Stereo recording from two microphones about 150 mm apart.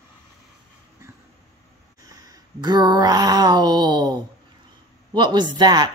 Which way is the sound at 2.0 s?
25° right (ahead or behind).